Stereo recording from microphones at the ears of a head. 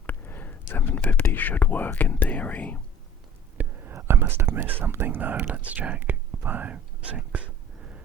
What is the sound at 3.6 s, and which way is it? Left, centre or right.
Speech, right.